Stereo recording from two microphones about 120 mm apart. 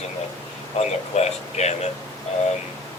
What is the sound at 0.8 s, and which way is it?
Speech, 65° left (ahead or behind).